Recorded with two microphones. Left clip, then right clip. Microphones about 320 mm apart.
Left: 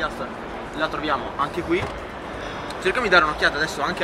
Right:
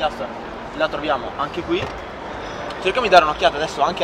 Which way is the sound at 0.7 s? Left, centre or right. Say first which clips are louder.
Right 3 dB; centre.